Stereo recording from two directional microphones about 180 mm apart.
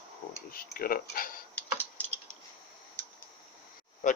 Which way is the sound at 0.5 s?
55° left (ahead or behind).